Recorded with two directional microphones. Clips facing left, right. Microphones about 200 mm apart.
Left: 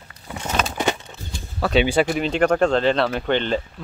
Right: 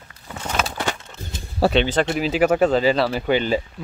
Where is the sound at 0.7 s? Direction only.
20° left (ahead or behind).